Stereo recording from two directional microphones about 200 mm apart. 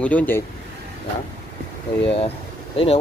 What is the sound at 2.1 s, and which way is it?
Speech, 30° left (ahead or behind).